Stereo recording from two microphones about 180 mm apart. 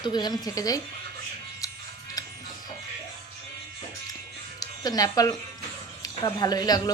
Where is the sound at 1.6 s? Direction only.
20° left (ahead or behind).